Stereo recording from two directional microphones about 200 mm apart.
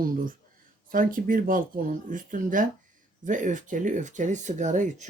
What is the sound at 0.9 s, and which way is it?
Speech, 45° right (ahead or behind).